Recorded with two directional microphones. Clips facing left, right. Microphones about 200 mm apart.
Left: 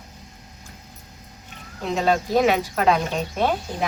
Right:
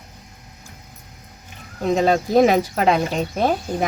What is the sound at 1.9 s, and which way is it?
Speech, 40° right (ahead or behind).